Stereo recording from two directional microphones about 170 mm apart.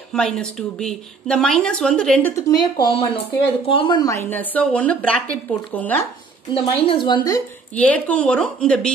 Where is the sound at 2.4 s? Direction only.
25° left (ahead or behind).